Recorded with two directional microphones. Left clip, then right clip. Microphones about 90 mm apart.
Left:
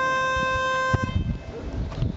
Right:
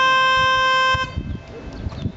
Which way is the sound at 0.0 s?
25° left (ahead or behind).